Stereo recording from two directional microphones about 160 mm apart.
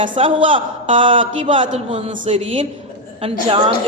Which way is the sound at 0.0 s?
35° right (ahead or behind).